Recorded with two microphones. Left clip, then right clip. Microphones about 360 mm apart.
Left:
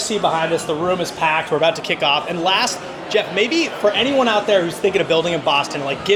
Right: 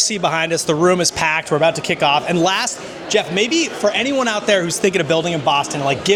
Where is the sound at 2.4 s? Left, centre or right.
Right.